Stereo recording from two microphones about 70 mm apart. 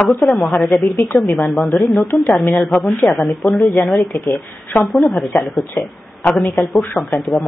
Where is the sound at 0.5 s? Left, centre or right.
Centre.